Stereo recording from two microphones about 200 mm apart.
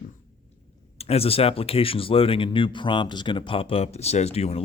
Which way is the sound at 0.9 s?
30° left (ahead or behind).